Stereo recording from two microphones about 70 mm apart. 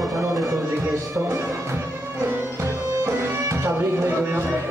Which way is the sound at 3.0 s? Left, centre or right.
Right.